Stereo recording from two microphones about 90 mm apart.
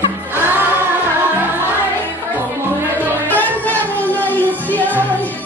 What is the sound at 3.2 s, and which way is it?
Music, 20° left (ahead or behind).